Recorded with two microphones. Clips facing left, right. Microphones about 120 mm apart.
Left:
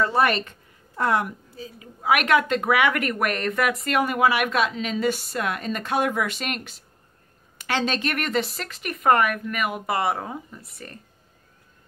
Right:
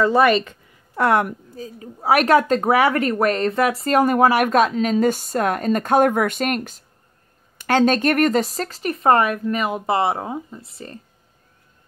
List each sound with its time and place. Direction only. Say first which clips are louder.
0.9 s a woman's voice: right 5 dB; 65° right (ahead or behind); by 11.0 s 25° right (ahead or behind)